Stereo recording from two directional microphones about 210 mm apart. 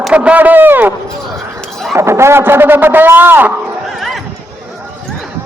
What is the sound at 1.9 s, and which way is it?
A man's voice, 10° right (ahead or behind).